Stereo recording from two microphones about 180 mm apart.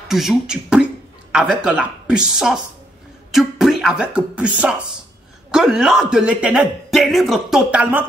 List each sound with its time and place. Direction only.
0.1 s a man's voice: centre (ahead or behind)